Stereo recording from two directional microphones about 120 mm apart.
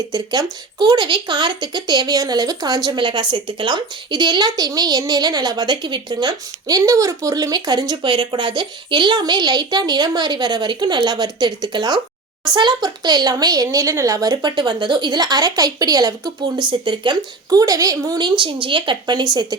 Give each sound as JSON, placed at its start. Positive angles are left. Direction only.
{"t": 0.1, "sound": "speech", "side_deg": -30}